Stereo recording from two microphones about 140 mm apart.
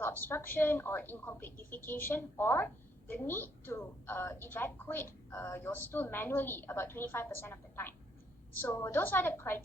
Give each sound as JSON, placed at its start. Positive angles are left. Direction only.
{"t": 0.0, "sound": "a woman's voice", "side_deg": 15}